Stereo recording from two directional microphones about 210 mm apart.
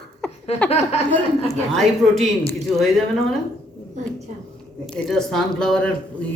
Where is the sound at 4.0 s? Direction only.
35° right (ahead or behind).